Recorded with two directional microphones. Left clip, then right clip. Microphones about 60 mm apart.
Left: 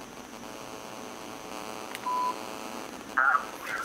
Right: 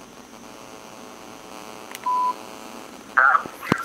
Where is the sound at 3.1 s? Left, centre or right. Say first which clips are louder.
Right 8 dB; right.